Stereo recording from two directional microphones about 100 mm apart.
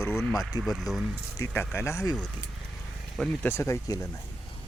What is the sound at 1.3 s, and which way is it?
Speech, 25° left (ahead or behind).